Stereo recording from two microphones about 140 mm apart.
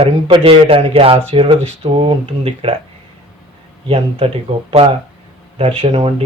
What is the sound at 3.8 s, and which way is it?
Speech, 45° right (ahead or behind).